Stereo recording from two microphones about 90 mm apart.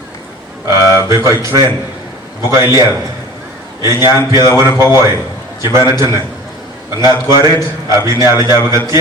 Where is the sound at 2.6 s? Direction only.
45° left (ahead or behind).